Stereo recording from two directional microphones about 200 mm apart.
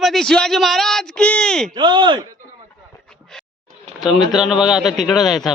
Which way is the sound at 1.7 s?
20° right (ahead or behind).